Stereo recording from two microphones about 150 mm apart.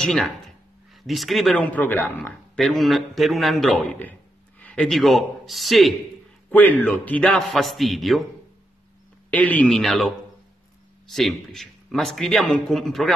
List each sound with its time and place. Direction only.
0.0 s speech: 5° left (ahead or behind)
6.5 s speech: 10° left (ahead or behind)
9.3 s speech: 10° left (ahead or behind)